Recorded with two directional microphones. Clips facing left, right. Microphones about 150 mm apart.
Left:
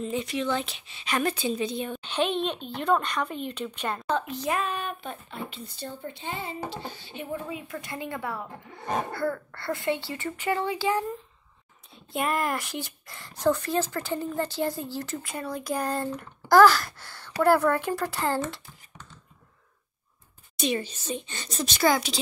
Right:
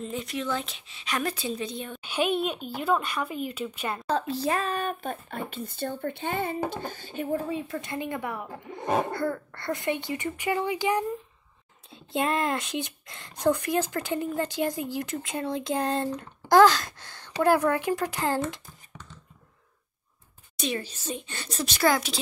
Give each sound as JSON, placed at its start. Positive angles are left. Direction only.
{"t": 0.0, "sound": "a woman's voice", "side_deg": 0}
{"t": 2.0, "sound": "speech", "side_deg": -10}
{"t": 4.1, "sound": "speech", "side_deg": -35}
{"t": 12.1, "sound": "speech", "side_deg": -25}
{"t": 20.6, "sound": "a woman's voice", "side_deg": 0}